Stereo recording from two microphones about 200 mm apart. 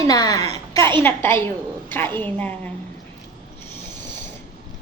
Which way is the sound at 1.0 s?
10° left (ahead or behind).